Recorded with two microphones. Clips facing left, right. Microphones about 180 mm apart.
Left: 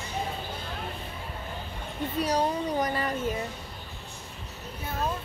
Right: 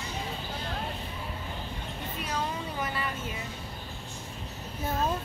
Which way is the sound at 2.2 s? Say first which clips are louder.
Left 7 dB; 40° left (ahead or behind).